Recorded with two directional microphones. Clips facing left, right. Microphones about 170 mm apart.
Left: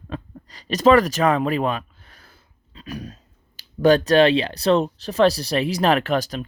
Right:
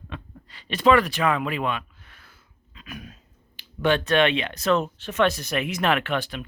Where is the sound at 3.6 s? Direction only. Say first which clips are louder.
Left 7 dB; 40° left (ahead or behind).